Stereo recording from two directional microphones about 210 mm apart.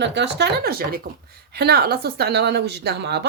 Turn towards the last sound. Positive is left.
turn(degrees=-55)  # may be behind; listen again after turning